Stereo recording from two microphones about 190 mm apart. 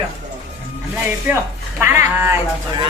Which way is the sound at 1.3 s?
10° right (ahead or behind).